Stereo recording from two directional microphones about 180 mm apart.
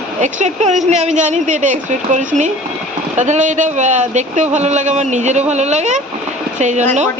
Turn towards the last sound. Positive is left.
turn(degrees=-40)  # may be behind; listen again after turning